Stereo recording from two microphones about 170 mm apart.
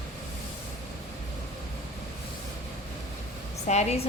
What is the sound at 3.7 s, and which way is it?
Speech, 40° left (ahead or behind).